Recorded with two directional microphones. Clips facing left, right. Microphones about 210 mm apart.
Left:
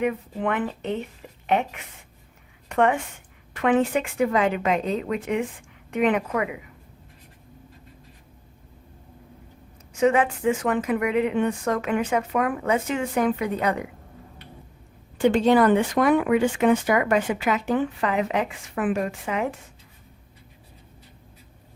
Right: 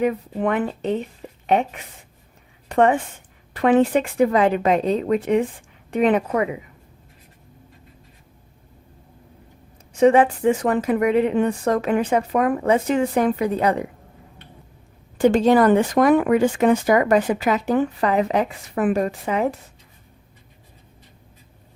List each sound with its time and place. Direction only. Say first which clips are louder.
0.0 s a woman's voice: right 4 dB; 40° right (ahead or behind)
9.9 s speech: right 5 dB; 35° right (ahead or behind)
15.2 s speech: right 3 dB; 40° right (ahead or behind)